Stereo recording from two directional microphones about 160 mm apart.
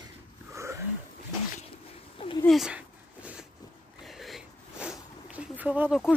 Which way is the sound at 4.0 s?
Centre (ahead or behind).